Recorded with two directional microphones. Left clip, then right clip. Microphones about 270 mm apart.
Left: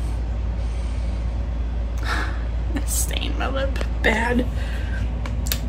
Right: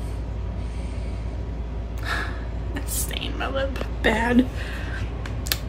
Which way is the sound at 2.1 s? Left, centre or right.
Centre.